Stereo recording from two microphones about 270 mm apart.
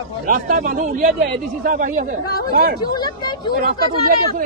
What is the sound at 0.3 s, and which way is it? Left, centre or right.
Speech, right.